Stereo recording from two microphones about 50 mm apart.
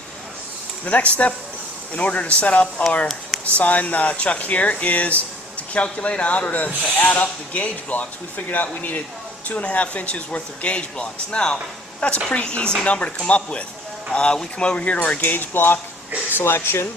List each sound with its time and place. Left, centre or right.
0.9 s a man's voice: left
15.2 s speech: left